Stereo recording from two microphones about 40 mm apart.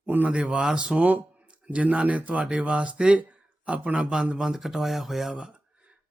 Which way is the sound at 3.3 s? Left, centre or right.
Right.